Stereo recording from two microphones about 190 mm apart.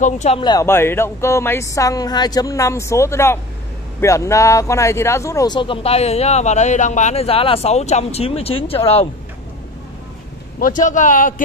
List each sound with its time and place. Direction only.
0.0 s speech: 40° left (ahead or behind)
0.4 s a woman's voice: 20° left (ahead or behind)
10.6 s a man's voice: 40° left (ahead or behind)